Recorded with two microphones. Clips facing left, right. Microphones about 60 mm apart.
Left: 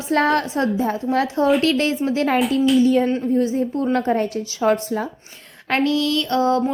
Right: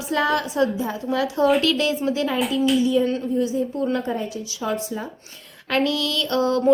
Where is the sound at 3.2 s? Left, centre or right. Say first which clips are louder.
Left 3 dB; left.